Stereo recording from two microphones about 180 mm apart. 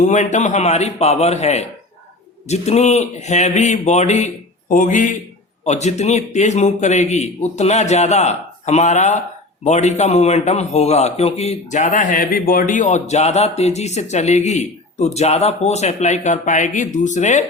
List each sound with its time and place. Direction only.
0.0 s a man's voice: 45° left (ahead or behind)